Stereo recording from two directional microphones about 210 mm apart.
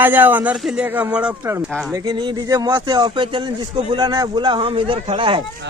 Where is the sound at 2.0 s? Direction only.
20° right (ahead or behind).